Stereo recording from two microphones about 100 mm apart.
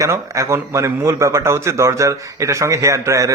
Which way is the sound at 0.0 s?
30° right (ahead or behind).